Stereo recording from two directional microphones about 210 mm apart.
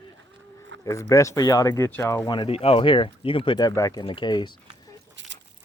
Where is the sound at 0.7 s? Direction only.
60° right (ahead or behind).